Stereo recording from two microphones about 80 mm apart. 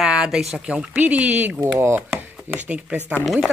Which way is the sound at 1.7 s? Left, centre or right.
Right.